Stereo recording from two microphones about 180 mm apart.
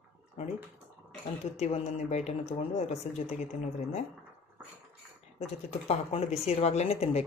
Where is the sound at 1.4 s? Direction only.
40° left (ahead or behind).